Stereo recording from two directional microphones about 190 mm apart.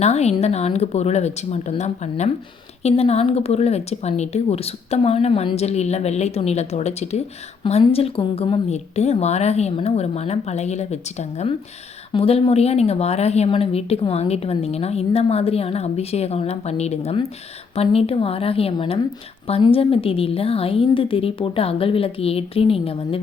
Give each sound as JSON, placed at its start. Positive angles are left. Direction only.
{"t": 0.0, "sound": "a woman's voice", "side_deg": 35}